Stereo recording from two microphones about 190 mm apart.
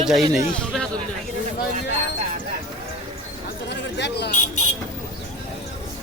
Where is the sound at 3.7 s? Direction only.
65° left (ahead or behind).